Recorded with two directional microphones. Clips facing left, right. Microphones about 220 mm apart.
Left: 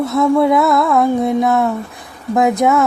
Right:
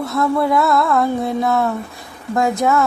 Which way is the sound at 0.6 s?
Centre (ahead or behind).